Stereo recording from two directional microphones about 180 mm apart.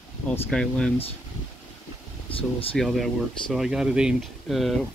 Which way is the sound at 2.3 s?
30° left (ahead or behind).